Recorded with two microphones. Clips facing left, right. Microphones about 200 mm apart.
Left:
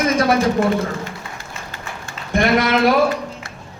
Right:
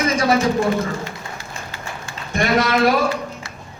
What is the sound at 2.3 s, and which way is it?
Speech, 55° left (ahead or behind).